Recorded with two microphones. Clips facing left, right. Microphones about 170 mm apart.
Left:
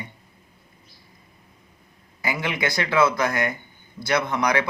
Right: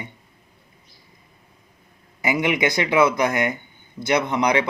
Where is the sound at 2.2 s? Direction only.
20° right (ahead or behind).